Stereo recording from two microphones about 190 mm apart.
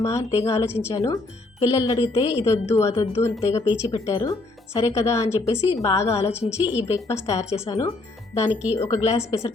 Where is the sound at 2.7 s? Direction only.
15° left (ahead or behind).